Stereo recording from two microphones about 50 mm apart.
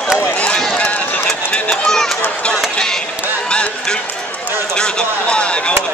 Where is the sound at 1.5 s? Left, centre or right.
Centre.